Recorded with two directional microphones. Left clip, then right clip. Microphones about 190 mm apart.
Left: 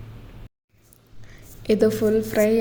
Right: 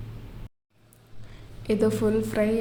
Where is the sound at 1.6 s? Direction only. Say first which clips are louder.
Left 5 dB; 20° left (ahead or behind).